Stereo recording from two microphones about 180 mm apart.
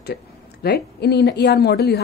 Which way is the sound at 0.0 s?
60° left (ahead or behind).